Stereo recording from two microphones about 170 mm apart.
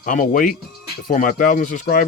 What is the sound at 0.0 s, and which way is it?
Speech, 50° left (ahead or behind).